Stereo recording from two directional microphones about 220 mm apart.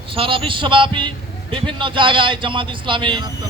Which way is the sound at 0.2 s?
25° right (ahead or behind).